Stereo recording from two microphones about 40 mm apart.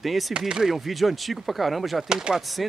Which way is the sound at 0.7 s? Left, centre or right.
Centre.